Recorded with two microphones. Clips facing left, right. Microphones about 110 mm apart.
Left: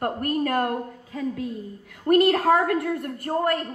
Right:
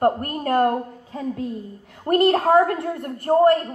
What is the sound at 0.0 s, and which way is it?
A woman's voice, 30° right (ahead or behind).